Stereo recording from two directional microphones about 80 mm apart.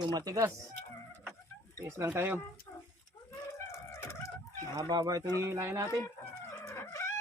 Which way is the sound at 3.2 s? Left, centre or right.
Left.